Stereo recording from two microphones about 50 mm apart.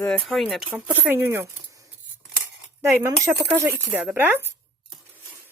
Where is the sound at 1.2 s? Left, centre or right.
Right.